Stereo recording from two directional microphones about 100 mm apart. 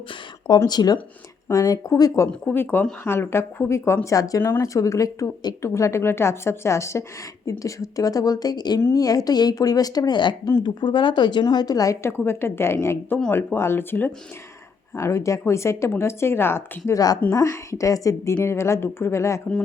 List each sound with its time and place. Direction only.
0.1 s speech: 45° left (ahead or behind)
2.4 s speech: 20° left (ahead or behind); by 4.4 s 35° left (ahead or behind)
4.4 s speech: 25° left (ahead or behind)
4.6 s speech: 35° left (ahead or behind)
5.6 s speech: 30° left (ahead or behind)
8.8 s speech: 30° left (ahead or behind)
12.1 s speech: 25° left (ahead or behind)